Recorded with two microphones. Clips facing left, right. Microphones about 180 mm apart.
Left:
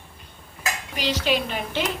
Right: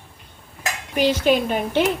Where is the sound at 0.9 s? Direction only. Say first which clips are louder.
Right 7 dB; 55° right (ahead or behind).